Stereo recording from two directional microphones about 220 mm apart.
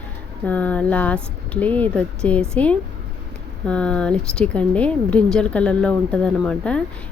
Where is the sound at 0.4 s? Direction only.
5° left (ahead or behind).